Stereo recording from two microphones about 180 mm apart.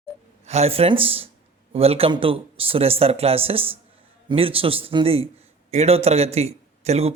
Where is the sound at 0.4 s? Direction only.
35° right (ahead or behind).